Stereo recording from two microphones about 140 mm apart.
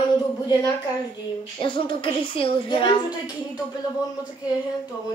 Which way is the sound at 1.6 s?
35° left (ahead or behind).